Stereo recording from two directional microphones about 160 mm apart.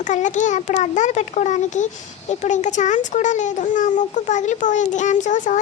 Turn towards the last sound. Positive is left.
turn(degrees=50)  # may be behind; listen again after turning